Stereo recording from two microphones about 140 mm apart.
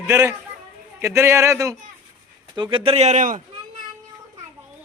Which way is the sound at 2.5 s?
35° right (ahead or behind).